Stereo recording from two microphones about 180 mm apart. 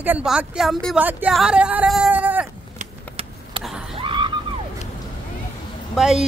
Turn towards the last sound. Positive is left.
turn(degrees=-5)  # may be behind; listen again after turning